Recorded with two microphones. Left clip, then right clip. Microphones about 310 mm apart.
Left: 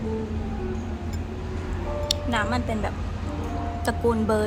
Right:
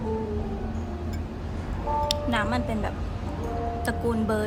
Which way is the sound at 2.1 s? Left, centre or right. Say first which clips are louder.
Left 1 dB; centre.